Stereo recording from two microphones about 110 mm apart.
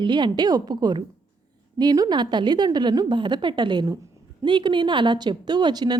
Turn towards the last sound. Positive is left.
turn(degrees=-40)  # may be behind; listen again after turning